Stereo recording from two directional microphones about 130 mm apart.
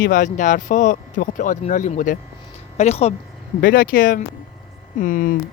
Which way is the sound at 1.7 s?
70° left (ahead or behind).